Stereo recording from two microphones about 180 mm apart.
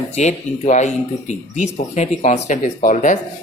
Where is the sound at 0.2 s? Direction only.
40° left (ahead or behind).